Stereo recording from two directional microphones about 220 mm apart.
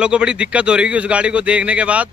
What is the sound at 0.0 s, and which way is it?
A man's voice, 5° right (ahead or behind).